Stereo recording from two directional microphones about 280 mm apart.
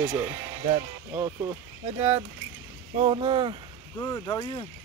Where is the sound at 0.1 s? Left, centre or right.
Centre.